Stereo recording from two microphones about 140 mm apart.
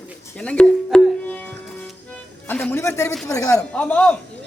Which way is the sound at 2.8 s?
20° left (ahead or behind).